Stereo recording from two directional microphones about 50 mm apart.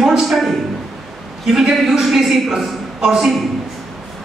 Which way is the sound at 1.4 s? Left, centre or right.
Centre.